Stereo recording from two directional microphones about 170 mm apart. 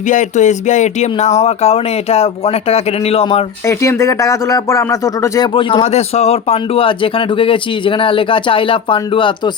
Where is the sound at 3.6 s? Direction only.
15° left (ahead or behind).